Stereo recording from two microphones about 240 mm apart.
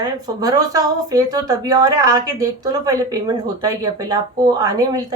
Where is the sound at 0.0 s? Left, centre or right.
Centre.